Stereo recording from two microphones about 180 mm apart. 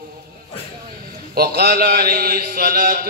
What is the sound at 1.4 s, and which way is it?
Mantra, 55° right (ahead or behind).